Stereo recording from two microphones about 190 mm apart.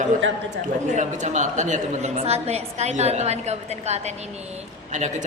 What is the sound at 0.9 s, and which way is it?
A woman's voice, 40° right (ahead or behind).